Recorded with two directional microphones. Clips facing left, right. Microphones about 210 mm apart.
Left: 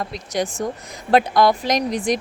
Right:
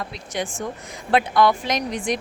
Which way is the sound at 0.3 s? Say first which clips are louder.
Left 4 dB; 40° left (ahead or behind).